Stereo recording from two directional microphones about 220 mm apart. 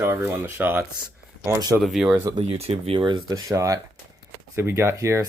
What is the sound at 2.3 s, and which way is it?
Speech, 30° right (ahead or behind).